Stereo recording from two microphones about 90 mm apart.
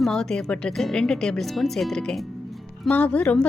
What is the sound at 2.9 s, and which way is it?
Speech, 15° left (ahead or behind).